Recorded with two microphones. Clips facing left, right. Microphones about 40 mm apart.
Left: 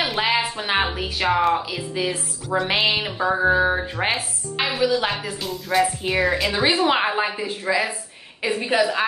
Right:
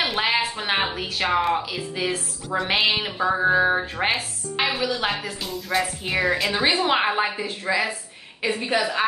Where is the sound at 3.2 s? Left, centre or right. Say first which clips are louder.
Left 1 dB; left.